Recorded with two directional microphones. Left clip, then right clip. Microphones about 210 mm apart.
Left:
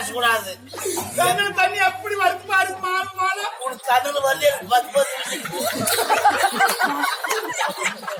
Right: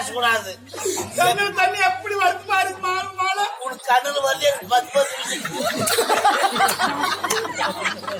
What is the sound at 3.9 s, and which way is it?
Speech, 20° right (ahead or behind).